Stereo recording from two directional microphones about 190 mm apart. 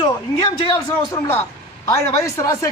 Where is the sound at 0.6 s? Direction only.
20° left (ahead or behind).